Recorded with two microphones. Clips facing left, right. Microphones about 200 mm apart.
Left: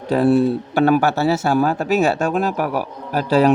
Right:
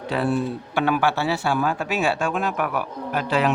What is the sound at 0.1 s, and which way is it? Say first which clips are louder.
Speech: left 8 dB; 40° left (ahead or behind).